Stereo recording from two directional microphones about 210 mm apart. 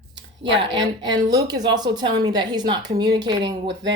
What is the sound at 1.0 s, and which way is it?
A woman's voice, 20° right (ahead or behind).